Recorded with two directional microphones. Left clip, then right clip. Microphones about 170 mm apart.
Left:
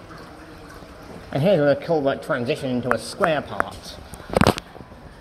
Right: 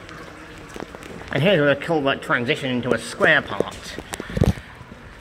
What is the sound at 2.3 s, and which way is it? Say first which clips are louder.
Speech: right 2 dB; 5° left (ahead or behind).